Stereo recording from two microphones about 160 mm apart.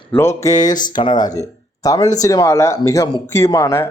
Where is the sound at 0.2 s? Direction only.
20° left (ahead or behind).